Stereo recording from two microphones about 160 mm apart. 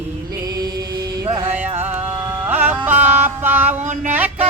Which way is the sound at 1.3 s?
15° right (ahead or behind).